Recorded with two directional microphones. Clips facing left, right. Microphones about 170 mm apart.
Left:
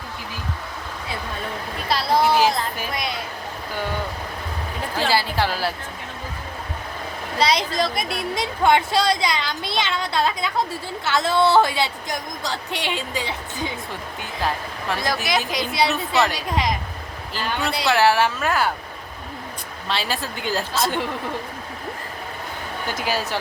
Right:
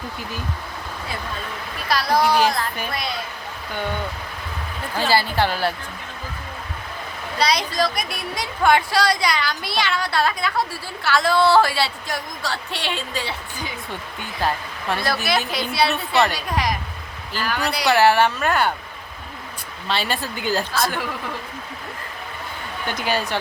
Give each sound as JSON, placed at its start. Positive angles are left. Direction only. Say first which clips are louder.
{"t": 1.9, "sound": "a woman's voice", "louder": "even", "side_deg": 25}
{"t": 2.2, "sound": "speech", "louder": "left 1 dB", "side_deg": 5}
{"t": 5.0, "sound": "speech", "louder": "right 2 dB", "side_deg": 0}
{"t": 7.3, "sound": "a woman's voice", "louder": "even", "side_deg": 25}
{"t": 14.2, "sound": "speech", "louder": "right 2 dB", "side_deg": 0}
{"t": 15.3, "sound": "a woman's voice", "louder": "right 1 dB", "side_deg": 20}
{"t": 16.1, "sound": "speech", "louder": "right 2 dB", "side_deg": 0}
{"t": 17.3, "sound": "a woman's voice", "louder": "right 1 dB", "side_deg": 25}
{"t": 17.8, "sound": "speech", "louder": "right 2 dB", "side_deg": 0}
{"t": 19.9, "sound": "speech", "louder": "right 2 dB", "side_deg": 0}
{"t": 20.7, "sound": "a woman's voice", "louder": "left 1 dB", "side_deg": 20}
{"t": 22.9, "sound": "speech", "louder": "right 2 dB", "side_deg": 0}